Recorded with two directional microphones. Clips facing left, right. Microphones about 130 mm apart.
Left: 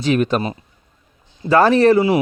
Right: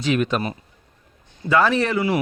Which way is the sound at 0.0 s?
40° left (ahead or behind).